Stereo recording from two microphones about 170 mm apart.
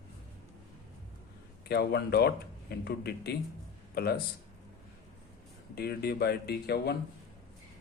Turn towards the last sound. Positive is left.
turn(degrees=70)  # may be behind; listen again after turning